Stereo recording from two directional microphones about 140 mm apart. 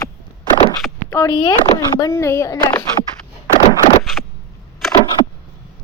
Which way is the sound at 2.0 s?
20° left (ahead or behind).